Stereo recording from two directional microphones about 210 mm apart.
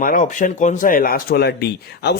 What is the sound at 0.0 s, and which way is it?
Speech, 40° left (ahead or behind).